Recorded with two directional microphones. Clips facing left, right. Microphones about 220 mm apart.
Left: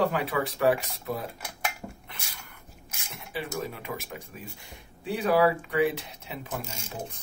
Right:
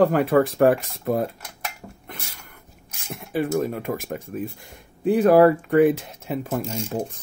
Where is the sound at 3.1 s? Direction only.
50° right (ahead or behind).